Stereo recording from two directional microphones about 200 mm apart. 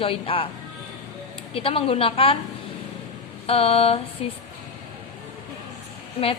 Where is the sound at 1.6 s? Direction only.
30° left (ahead or behind).